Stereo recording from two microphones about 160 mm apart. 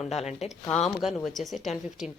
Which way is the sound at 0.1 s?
45° left (ahead or behind).